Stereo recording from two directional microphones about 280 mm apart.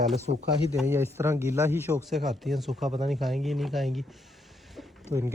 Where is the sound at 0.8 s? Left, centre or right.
Centre.